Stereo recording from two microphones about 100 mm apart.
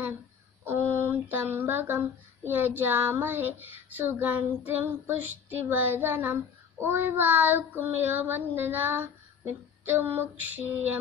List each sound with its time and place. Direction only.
0.9 s child singing: 20° right (ahead or behind)